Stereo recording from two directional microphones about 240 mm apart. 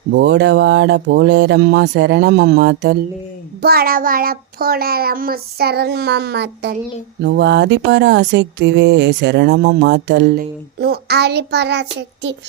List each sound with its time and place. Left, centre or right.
0.1 s a child's voice: right